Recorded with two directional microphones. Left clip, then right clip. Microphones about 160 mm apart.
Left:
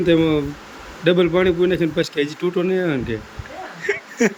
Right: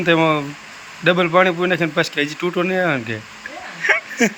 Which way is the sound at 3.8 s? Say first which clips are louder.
Right 4 dB; 10° left (ahead or behind).